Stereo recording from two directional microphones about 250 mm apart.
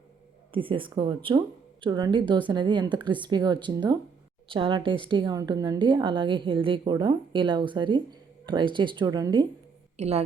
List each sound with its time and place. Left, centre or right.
0.5 s a woman's voice: centre